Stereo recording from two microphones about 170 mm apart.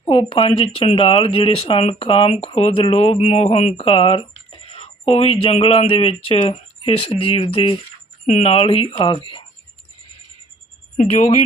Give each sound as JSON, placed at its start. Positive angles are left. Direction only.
{"t": 0.0, "sound": "speech", "side_deg": 35}
{"t": 11.1, "sound": "speech", "side_deg": 40}